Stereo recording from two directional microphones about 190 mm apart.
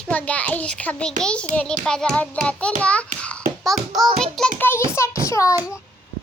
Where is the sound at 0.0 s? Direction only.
5° left (ahead or behind).